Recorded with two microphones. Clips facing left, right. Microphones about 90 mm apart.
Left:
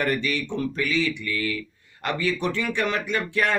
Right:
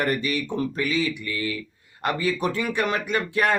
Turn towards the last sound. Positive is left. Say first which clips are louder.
# right 1 dB
turn(degrees=-40)  # may be behind; listen again after turning